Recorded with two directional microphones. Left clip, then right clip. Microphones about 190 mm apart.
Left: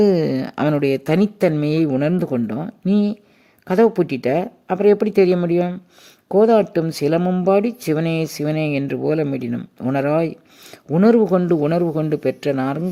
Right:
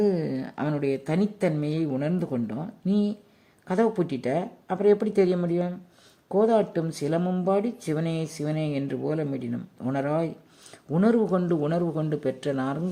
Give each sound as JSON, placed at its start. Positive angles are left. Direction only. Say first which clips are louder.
{"t": 0.0, "sound": "speech", "louder": "left 9 dB", "side_deg": 40}